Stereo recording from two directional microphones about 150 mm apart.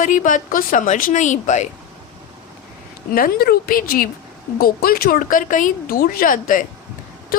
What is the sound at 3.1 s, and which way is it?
Speech, 80° left.